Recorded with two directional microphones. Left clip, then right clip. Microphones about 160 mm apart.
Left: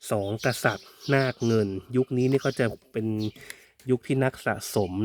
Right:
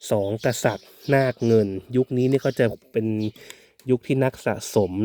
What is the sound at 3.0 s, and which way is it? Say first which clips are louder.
Speech: right 3 dB; 15° right (ahead or behind).